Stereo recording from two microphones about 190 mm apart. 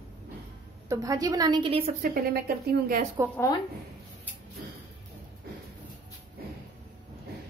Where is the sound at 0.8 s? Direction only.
20° right (ahead or behind).